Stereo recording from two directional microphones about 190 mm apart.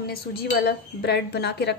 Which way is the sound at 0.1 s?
55° left (ahead or behind).